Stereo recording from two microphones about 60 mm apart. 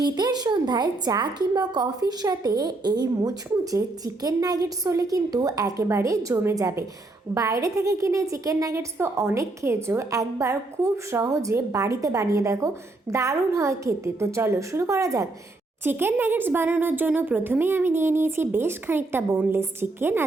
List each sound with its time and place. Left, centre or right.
0.5 s a woman's voice: right
1.1 s a woman's voice: right
1.8 s a woman's voice: right
5.8 s a woman's voice: right
10.1 s a woman's voice: right
15.8 s speech: right